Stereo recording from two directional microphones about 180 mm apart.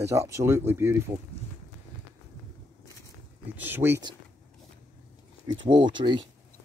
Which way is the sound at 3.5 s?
10° right (ahead or behind).